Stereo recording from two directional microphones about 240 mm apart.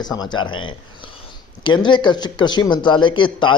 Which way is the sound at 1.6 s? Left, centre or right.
Centre.